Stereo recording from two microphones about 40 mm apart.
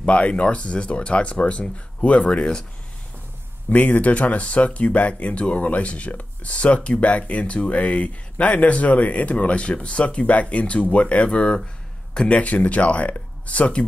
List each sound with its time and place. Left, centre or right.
0.0 s speech: left
3.7 s speech: left